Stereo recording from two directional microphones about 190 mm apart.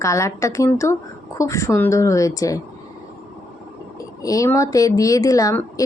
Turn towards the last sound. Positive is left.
turn(degrees=20)  # may be behind; listen again after turning